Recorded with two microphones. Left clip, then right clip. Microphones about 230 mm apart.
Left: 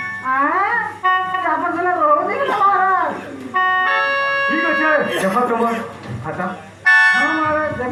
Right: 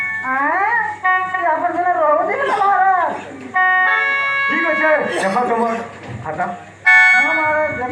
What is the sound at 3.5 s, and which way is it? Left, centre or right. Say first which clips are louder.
Music: right 2 dB; left.